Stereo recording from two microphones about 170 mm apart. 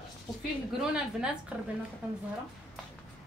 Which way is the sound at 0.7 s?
5° right (ahead or behind).